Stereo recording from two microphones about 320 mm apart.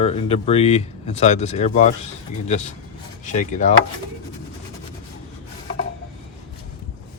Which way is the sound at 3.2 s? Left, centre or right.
Left.